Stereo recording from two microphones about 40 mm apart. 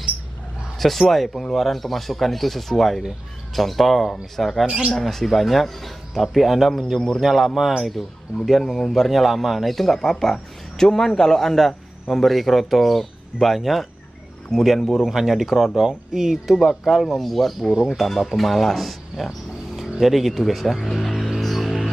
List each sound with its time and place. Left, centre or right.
0.7 s speech: centre
4.6 s speech: right
4.9 s speech: centre
17.1 s speech: centre
21.1 s music: centre